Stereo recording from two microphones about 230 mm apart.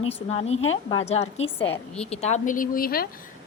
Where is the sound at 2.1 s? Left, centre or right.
Left.